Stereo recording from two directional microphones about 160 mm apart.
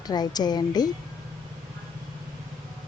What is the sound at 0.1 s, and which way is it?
Speech, 25° left (ahead or behind).